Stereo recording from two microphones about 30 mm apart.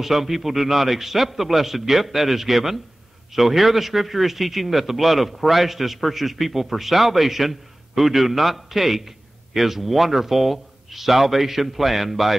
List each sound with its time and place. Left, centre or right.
0.0 s a man's voice: centre